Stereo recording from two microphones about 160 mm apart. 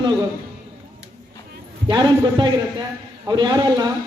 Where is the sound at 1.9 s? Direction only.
25° right (ahead or behind).